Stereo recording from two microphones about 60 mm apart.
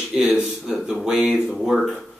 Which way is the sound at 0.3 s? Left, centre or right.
Centre.